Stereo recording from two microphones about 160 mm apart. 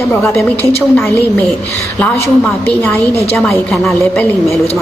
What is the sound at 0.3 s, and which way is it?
A woman's voice, 10° left (ahead or behind).